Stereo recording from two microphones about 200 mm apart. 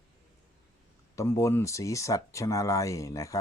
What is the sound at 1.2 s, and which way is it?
Speech, 15° left (ahead or behind).